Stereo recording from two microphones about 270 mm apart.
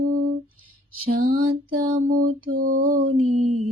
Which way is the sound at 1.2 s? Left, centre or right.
Right.